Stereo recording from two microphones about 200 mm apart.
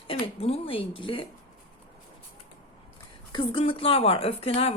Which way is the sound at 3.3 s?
25° left (ahead or behind).